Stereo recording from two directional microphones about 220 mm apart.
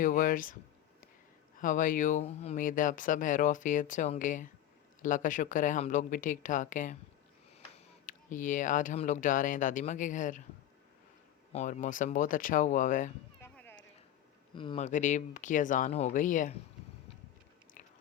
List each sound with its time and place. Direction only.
0.0 s speech: 35° left (ahead or behind)
1.5 s speech: 35° left (ahead or behind)
8.0 s speech: 35° left (ahead or behind)
11.5 s speech: 35° left (ahead or behind)
13.4 s a sound: 10° left (ahead or behind)
14.5 s speech: 20° left (ahead or behind)
14.8 s speech: 35° left (ahead or behind)